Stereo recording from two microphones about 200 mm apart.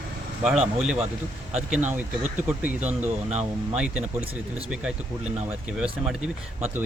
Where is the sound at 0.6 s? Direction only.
5° right (ahead or behind).